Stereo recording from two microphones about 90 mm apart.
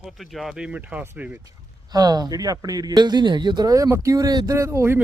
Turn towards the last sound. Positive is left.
turn(degrees=-30)  # may be behind; listen again after turning